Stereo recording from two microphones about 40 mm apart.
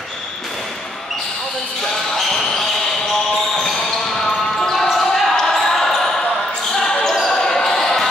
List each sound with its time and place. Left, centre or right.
3.5 s basketball bounce: centre
4.9 s basketball bounce: centre